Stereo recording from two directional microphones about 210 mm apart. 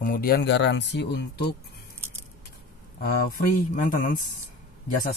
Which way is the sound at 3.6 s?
40° left (ahead or behind).